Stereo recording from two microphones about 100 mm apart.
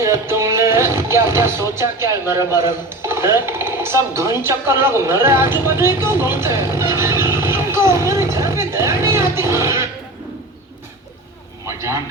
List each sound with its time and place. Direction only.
0.0 s music: 30° right (ahead or behind)
1.7 s speech: 25° right (ahead or behind)
6.7 s vehicle: 30° right (ahead or behind)
9.3 s music: 25° right (ahead or behind)
11.6 s a sound: 30° right (ahead or behind)